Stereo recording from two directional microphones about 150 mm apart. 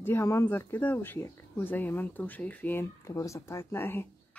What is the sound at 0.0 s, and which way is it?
Speech, 15° left (ahead or behind).